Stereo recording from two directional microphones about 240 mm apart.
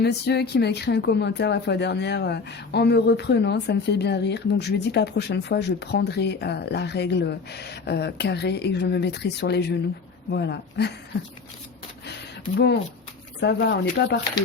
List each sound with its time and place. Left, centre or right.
0.0 s speech: left
12.5 s speech: left